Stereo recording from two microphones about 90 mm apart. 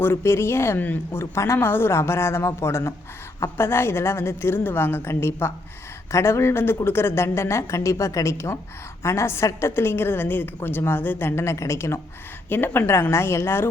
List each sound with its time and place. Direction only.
0.0 s a woman's voice: 30° left (ahead or behind)